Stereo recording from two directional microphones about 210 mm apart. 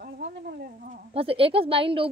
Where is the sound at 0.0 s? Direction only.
45° right (ahead or behind).